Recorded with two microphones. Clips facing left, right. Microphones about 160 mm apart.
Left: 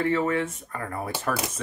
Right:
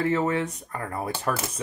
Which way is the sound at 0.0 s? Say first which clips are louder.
Even; 20° right (ahead or behind).